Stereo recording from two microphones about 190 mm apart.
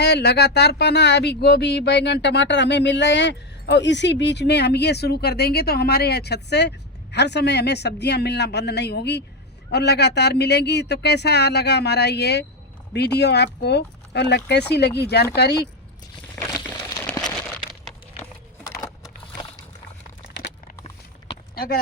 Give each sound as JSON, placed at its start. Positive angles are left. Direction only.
{"t": 0.0, "sound": "speech", "side_deg": 60}
{"t": 16.3, "sound": "crumpling", "side_deg": 15}
{"t": 21.5, "sound": "a sound", "side_deg": 55}